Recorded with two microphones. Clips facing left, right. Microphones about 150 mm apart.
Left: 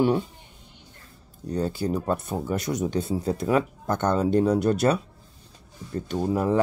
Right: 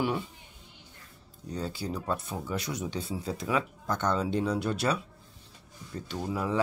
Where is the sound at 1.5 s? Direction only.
50° left (ahead or behind).